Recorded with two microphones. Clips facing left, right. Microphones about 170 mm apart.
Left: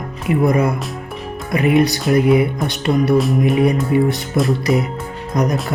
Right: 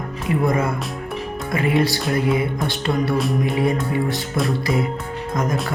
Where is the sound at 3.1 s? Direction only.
Centre (ahead or behind).